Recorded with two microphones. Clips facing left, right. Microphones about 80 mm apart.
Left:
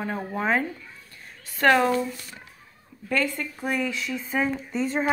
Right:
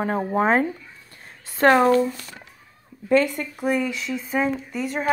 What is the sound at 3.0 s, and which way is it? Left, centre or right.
A woman's voice, right.